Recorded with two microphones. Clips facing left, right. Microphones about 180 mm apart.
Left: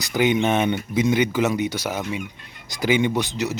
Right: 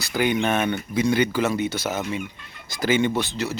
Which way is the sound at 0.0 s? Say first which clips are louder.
Left 2 dB; 20° left (ahead or behind).